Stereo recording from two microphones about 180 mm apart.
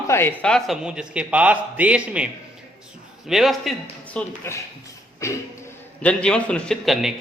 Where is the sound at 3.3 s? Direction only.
Centre (ahead or behind).